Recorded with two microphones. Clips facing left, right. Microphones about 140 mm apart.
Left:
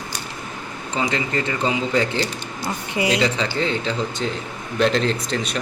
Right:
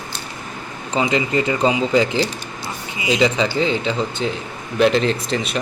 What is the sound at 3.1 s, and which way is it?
Speech, 5° right (ahead or behind).